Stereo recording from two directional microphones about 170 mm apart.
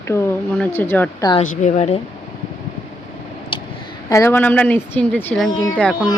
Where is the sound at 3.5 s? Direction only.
30° left (ahead or behind).